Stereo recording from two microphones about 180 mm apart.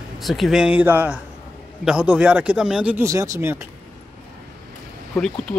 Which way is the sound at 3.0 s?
15° right (ahead or behind).